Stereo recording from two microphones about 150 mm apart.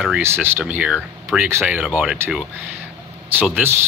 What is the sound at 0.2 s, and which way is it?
Speech, 15° right (ahead or behind).